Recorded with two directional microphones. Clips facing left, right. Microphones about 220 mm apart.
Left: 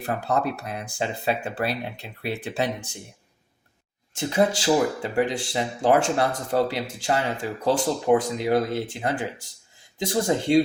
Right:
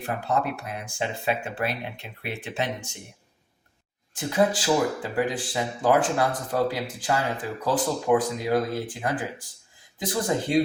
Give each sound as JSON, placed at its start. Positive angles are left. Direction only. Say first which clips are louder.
{"t": 0.3, "sound": "speech", "louder": "left 1 dB", "side_deg": 35}
{"t": 4.1, "sound": "speech", "louder": "left 1 dB", "side_deg": 25}